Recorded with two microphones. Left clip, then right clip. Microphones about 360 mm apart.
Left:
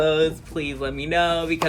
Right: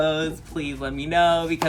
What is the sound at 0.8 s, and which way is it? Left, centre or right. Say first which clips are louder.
Speech: right 2 dB; right.